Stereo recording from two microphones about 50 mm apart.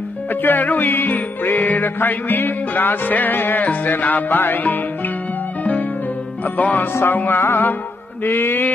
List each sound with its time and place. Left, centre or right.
0.3 s music: left
5.6 s music: left
6.9 s mantra: left
7.2 s music: left
8.2 s mantra: left